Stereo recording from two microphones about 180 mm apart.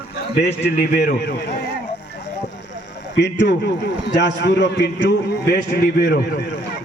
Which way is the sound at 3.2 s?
75° left (ahead or behind).